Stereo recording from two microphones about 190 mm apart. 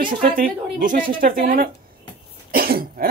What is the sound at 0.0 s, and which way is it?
A woman's voice, 45° right (ahead or behind).